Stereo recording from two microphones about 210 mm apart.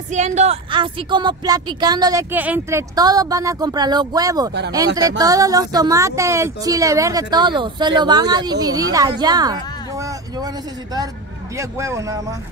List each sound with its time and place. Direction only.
0.1 s speech: 35° right (ahead or behind); by 12.4 s 15° right (ahead or behind)